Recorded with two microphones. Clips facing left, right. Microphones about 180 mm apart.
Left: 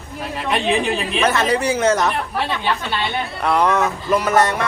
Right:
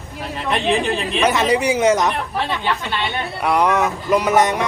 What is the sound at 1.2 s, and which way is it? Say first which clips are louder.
Speech: right 1 dB; 15° right (ahead or behind).